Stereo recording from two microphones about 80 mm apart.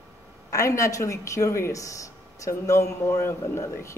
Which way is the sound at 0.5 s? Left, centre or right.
Left.